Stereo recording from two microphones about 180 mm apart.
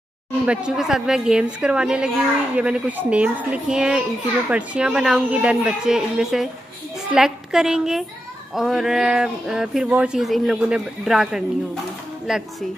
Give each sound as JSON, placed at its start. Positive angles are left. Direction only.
{"t": 0.5, "sound": "a woman's voice", "side_deg": -5}